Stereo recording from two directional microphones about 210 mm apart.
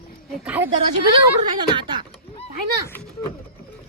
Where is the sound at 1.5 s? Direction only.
20° right (ahead or behind).